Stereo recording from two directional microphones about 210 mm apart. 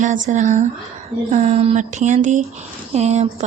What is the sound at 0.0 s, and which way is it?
Speech, 35° right (ahead or behind).